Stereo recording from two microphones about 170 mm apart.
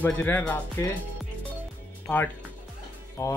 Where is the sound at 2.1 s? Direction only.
10° left (ahead or behind).